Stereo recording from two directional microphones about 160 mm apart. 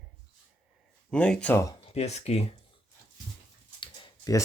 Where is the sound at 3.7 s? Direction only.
30° left (ahead or behind).